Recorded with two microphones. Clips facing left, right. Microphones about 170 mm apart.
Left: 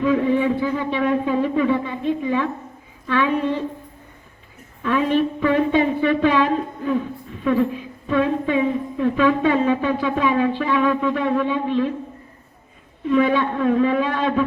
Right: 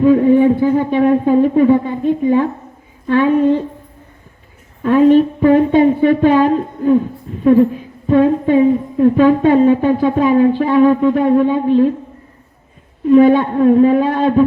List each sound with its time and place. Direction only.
0.0 s a sound: 45° right (ahead or behind)
3.1 s speech: 50° right (ahead or behind)
4.8 s speech: 45° right (ahead or behind)
13.1 s speech: 45° right (ahead or behind)